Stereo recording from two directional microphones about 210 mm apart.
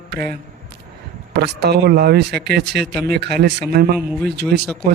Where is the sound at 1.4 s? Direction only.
50° right (ahead or behind).